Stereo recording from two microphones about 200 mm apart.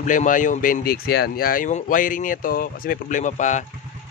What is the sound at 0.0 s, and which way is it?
Speech, 40° left (ahead or behind).